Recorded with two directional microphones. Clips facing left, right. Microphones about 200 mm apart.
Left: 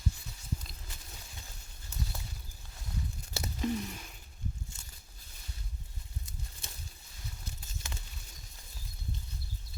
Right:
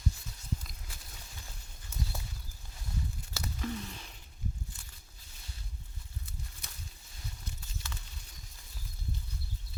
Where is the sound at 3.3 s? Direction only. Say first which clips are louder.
Left 4 dB; 25° left (ahead or behind).